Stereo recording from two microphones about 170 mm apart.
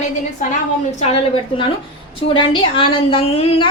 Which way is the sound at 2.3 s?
30° left (ahead or behind).